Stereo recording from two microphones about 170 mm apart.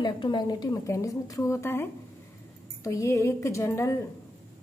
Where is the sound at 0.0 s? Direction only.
25° left (ahead or behind).